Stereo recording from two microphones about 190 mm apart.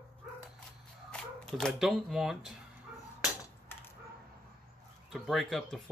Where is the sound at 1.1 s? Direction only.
5° left (ahead or behind).